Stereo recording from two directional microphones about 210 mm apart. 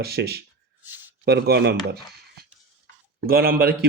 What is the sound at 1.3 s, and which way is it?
Speech, 50° right (ahead or behind).